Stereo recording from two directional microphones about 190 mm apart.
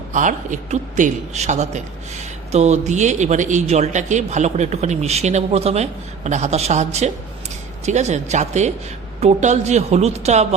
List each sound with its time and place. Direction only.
0.1 s a man's voice: 40° right (ahead or behind)